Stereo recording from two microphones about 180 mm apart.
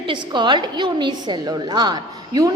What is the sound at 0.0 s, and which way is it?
A woman's voice, 25° right (ahead or behind).